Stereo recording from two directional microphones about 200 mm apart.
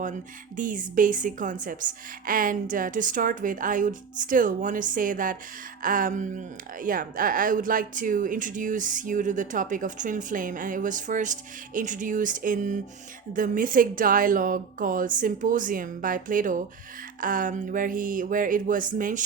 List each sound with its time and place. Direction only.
0.0 s a woman's voice: 40° right (ahead or behind)